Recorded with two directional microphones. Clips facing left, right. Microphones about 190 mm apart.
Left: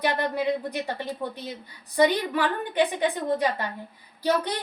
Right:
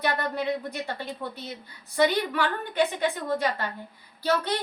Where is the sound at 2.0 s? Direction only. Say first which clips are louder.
Left 2 dB; 15° left (ahead or behind).